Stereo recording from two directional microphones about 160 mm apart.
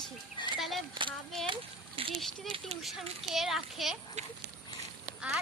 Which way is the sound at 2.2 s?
Centre (ahead or behind).